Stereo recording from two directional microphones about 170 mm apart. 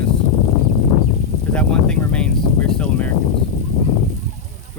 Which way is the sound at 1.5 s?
5° left (ahead or behind).